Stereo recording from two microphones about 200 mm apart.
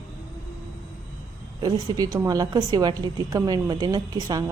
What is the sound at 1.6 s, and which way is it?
A woman's voice, 20° right (ahead or behind).